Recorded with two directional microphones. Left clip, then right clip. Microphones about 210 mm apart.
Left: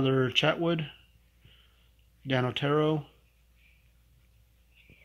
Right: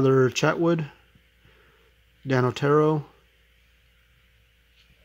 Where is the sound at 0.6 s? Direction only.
55° right (ahead or behind).